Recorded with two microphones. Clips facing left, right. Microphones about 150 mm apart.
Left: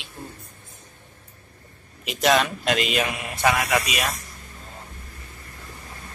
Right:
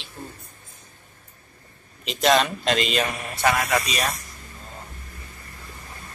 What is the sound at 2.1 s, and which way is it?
Speech, 5° left (ahead or behind).